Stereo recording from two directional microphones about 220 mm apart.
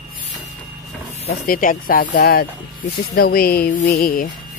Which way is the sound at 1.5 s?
40° left (ahead or behind).